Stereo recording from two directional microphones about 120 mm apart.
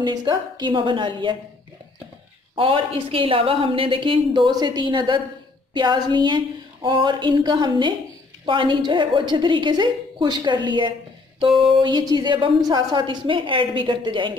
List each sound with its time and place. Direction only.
0.0 s a woman's voice: 35° right (ahead or behind)
2.5 s a woman's voice: 50° right (ahead or behind)